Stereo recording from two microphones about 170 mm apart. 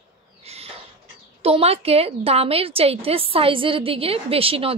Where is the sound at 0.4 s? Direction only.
35° right (ahead or behind).